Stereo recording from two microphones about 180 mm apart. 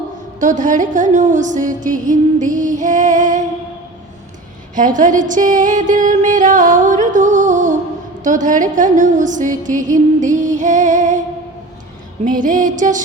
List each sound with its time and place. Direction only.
0.3 s music: 45° right (ahead or behind)
4.7 s music: 45° right (ahead or behind)
12.2 s music: 45° right (ahead or behind)